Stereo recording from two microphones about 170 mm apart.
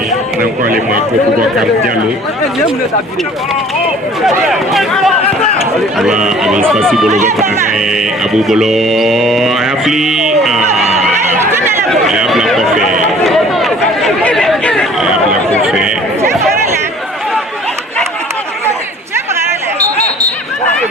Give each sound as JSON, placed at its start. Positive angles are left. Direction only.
{"t": 0.6, "sound": "speech", "side_deg": -55}
{"t": 4.2, "sound": "mantra", "side_deg": 0}
{"t": 6.4, "sound": "mantra", "side_deg": -5}
{"t": 7.1, "sound": "speech", "side_deg": -45}
{"t": 7.8, "sound": "mantra", "side_deg": -5}
{"t": 11.3, "sound": "speech", "side_deg": -15}
{"t": 11.9, "sound": "mantra", "side_deg": 0}
{"t": 12.8, "sound": "speech", "side_deg": -50}
{"t": 13.2, "sound": "chatter", "side_deg": 0}
{"t": 15.6, "sound": "mantra", "side_deg": -5}